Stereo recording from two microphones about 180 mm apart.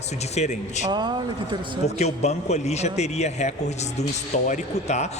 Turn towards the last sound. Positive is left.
turn(degrees=40)  # may be behind; listen again after turning